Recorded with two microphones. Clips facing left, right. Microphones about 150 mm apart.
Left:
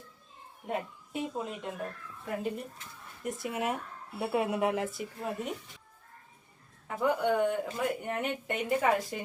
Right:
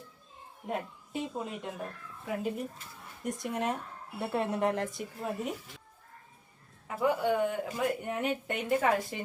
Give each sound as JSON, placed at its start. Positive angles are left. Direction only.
{"t": 0.7, "sound": "speech", "side_deg": 0}
{"t": 6.8, "sound": "speech", "side_deg": -5}